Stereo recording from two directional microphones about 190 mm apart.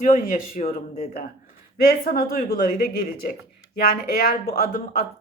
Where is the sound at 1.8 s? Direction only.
50° left (ahead or behind).